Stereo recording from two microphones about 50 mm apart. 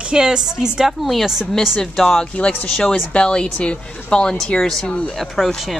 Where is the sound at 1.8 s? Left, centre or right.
Centre.